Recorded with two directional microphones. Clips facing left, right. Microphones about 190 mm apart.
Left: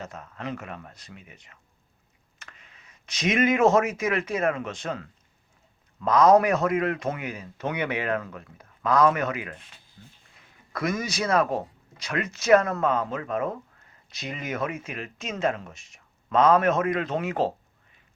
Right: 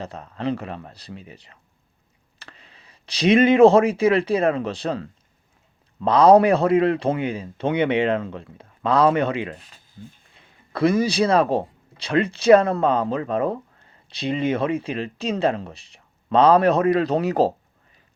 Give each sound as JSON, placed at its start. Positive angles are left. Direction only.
{"t": 0.0, "sound": "speech", "side_deg": -30}